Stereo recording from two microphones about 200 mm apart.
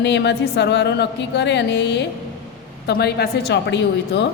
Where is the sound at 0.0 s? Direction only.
60° left (ahead or behind).